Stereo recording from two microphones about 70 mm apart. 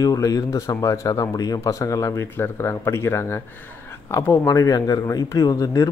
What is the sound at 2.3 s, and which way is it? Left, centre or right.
Speech, left.